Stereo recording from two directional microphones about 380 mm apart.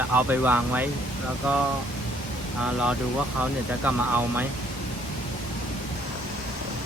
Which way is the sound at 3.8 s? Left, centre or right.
Centre.